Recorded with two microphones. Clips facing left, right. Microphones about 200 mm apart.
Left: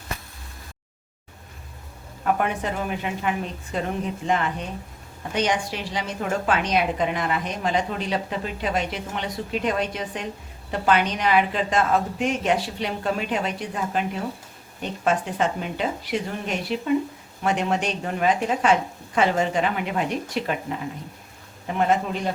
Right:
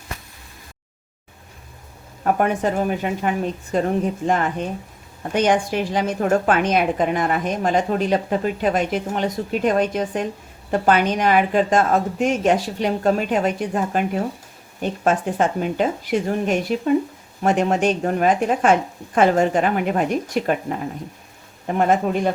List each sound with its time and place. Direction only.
2.2 s a woman's voice: 45° right (ahead or behind)